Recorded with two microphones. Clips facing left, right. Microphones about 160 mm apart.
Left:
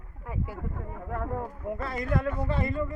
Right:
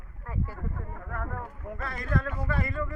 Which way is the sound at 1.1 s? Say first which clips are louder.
Left 6 dB; 25° left (ahead or behind).